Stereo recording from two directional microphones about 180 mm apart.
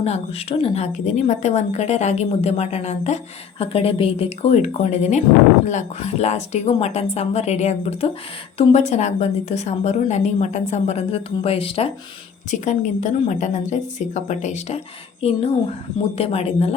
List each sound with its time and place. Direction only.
0.0 s a woman's voice: 35° left (ahead or behind)
12.5 s a woman's voice: 40° left (ahead or behind)